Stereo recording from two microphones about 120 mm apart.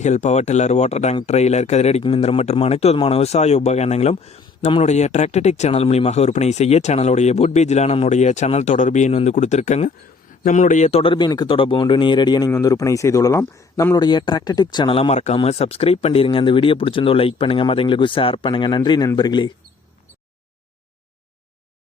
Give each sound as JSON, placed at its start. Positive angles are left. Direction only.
{"t": 0.0, "sound": "speech", "side_deg": 80}
{"t": 10.4, "sound": "speech", "side_deg": 90}
{"t": 11.0, "sound": "speech", "side_deg": 40}
{"t": 14.9, "sound": "speech", "side_deg": 60}